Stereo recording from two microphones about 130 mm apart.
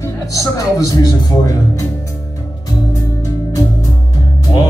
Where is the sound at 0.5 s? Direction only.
30° left (ahead or behind).